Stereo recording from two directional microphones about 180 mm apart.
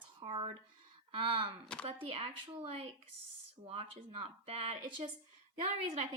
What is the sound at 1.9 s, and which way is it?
Speech, 30° right (ahead or behind).